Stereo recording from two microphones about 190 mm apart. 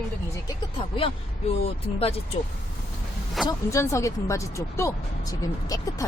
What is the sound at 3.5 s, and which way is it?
Speech, 15° left (ahead or behind).